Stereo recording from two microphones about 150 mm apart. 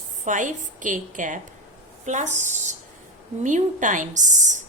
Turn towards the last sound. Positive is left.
turn(degrees=-55)  # may be behind; listen again after turning